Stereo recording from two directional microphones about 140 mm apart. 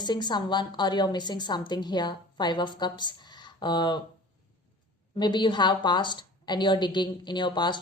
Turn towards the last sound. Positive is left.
turn(degrees=35)  # may be behind; listen again after turning